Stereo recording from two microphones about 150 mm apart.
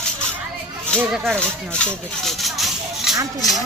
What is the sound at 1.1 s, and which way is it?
Speech, 5° left (ahead or behind).